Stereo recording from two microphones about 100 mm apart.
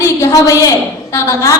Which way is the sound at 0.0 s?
25° left (ahead or behind).